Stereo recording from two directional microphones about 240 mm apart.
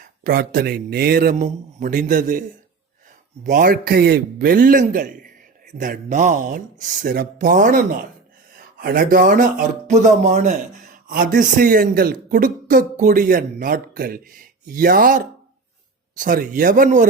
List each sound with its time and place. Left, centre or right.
0.0 s speech: right
3.4 s speech: right